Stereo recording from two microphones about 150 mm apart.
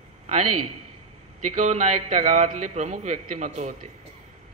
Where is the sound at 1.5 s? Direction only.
50° right (ahead or behind).